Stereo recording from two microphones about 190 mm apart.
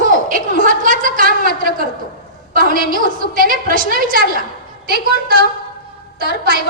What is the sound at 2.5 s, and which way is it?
A woman's voice, 45° right (ahead or behind).